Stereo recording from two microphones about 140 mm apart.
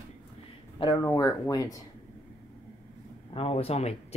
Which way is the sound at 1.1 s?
25° left (ahead or behind).